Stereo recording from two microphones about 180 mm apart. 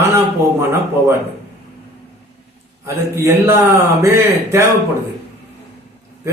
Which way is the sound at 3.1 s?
15° right (ahead or behind).